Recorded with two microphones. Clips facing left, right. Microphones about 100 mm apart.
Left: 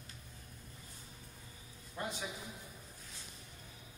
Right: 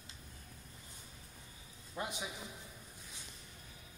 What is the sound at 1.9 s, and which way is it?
Speech, 15° right (ahead or behind).